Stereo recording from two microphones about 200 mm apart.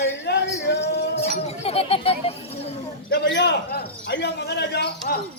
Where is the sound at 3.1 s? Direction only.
60° left (ahead or behind).